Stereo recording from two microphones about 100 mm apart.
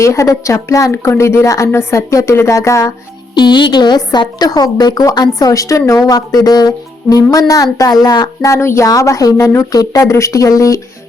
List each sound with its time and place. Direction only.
0.0 s speech: 30° left (ahead or behind)
3.3 s a woman's voice: 50° left (ahead or behind)
8.4 s speech: 30° left (ahead or behind)